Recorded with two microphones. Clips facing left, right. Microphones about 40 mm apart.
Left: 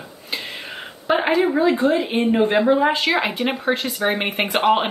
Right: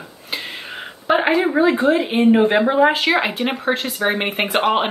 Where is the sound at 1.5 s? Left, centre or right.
Right.